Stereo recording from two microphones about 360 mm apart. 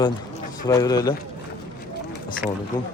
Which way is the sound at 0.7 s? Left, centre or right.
Centre.